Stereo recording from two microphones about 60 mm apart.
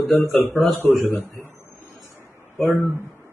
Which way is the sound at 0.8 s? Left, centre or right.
Centre.